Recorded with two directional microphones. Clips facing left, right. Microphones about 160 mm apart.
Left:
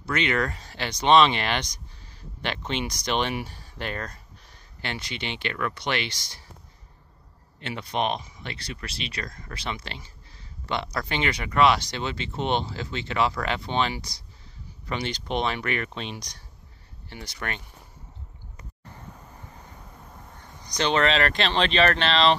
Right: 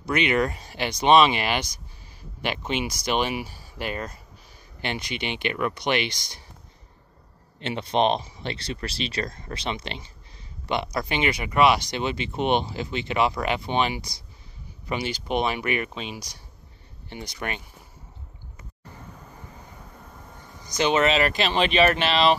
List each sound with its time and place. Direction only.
0.0 s speech: 15° right (ahead or behind)
7.6 s speech: 25° right (ahead or behind)
20.6 s speech: 5° right (ahead or behind)